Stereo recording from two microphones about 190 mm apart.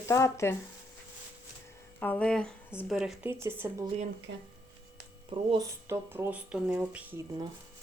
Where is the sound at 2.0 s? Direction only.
5° left (ahead or behind); by 3.7 s 10° right (ahead or behind).